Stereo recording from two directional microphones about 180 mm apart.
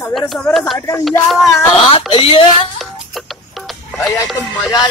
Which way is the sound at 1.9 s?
30° left (ahead or behind).